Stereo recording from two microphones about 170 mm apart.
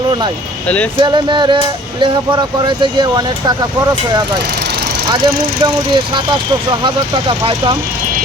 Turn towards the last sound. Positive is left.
turn(degrees=-30)  # may be behind; listen again after turning